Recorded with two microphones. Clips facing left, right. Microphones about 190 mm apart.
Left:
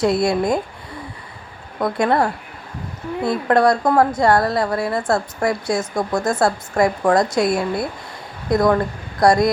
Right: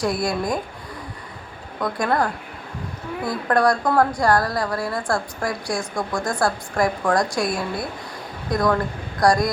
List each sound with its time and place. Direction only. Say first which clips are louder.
0.0 s a woman's voice: left 5 dB; 25° left (ahead or behind)
1.8 s a woman's voice: left 4 dB; 25° left (ahead or behind)